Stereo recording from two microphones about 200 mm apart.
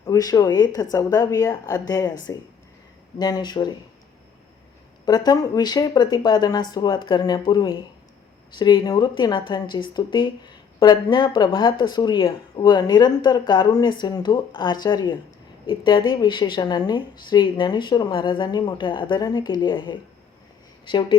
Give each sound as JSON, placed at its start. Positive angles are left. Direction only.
{"t": 0.0, "sound": "speech", "side_deg": 15}
{"t": 5.0, "sound": "speech", "side_deg": 20}